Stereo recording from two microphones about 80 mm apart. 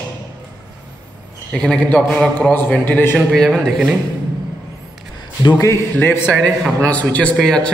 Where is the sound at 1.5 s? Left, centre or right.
Centre.